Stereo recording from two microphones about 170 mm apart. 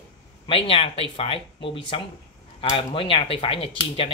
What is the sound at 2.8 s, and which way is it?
Speech, 30° left (ahead or behind).